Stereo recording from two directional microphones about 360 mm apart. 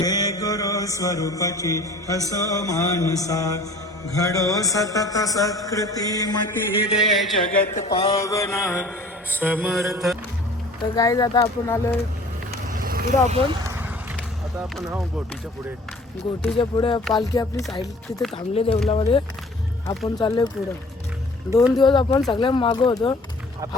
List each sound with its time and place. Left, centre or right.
0.0 s mantra: centre
2.3 s a man's voice: centre
6.9 s mantra: centre
7.4 s a man's voice: left
9.3 s mantra: centre
10.9 s a man's voice: centre
12.7 s vehicle: right
14.6 s mantra: centre
16.6 s a man's voice: centre
19.9 s mantra: centre
20.2 s a man's voice: centre
21.5 s a man's voice: centre